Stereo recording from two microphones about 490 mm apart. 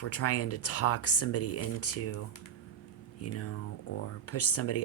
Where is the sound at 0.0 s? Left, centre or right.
Left.